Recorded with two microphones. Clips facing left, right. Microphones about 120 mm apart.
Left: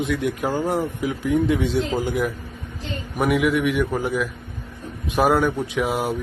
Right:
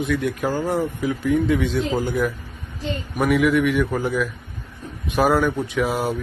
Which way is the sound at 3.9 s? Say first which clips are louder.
Right 1 dB; 25° left (ahead or behind).